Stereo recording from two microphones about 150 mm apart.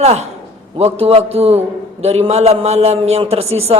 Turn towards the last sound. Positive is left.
turn(degrees=-45)  # may be behind; listen again after turning